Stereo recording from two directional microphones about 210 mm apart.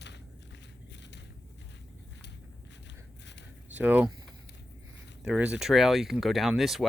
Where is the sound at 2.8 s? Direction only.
55° left (ahead or behind).